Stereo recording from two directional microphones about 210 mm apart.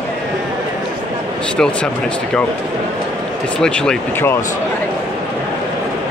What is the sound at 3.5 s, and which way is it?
Speech, 5° left (ahead or behind).